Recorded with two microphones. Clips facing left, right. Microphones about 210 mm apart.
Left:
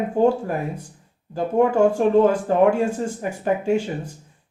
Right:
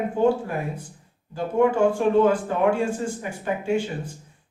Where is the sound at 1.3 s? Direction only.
40° left (ahead or behind).